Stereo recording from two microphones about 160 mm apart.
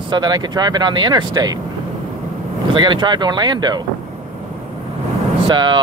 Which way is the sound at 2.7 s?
30° right (ahead or behind).